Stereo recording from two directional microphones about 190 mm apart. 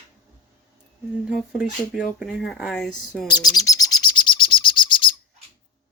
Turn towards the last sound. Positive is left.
turn(degrees=25)  # may be behind; listen again after turning